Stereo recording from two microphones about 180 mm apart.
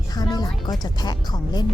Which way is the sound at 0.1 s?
20° left (ahead or behind).